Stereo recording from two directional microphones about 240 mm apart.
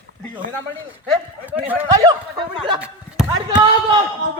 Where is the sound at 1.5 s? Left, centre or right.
Centre.